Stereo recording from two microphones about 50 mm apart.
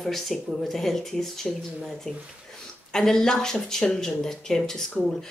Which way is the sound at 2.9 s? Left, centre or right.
Centre.